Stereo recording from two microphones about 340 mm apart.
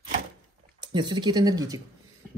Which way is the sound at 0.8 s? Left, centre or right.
Centre.